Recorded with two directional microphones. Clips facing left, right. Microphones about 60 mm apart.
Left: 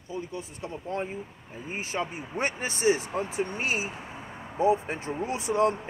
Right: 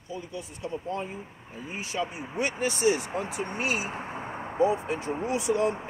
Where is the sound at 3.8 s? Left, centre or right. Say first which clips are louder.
Right 3 dB; right.